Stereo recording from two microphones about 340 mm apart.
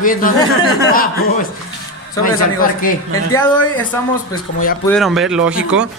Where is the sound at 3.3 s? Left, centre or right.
Centre.